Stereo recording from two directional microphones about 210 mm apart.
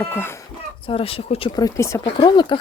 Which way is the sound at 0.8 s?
25° left (ahead or behind).